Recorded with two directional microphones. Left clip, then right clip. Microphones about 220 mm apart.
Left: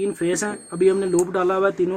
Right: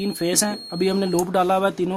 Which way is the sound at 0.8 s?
45° right (ahead or behind).